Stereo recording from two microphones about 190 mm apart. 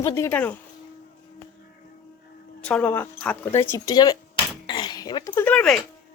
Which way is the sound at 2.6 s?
5° left (ahead or behind).